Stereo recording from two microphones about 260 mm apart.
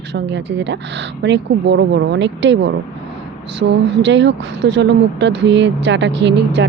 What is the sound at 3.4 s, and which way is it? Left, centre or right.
Speech, right.